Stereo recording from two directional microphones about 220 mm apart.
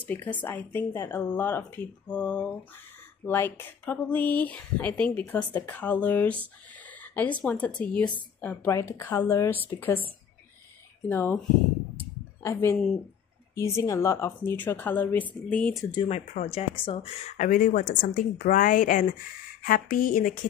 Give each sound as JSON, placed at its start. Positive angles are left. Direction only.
{"t": 0.0, "sound": "speech", "side_deg": 5}
{"t": 11.1, "sound": "speech", "side_deg": 10}
{"t": 12.5, "sound": "speech", "side_deg": 15}
{"t": 15.9, "sound": "speech", "side_deg": 25}
{"t": 17.5, "sound": "a woman's voice", "side_deg": 40}